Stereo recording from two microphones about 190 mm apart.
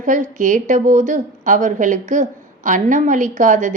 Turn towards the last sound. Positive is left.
turn(degrees=-40)  # may be behind; listen again after turning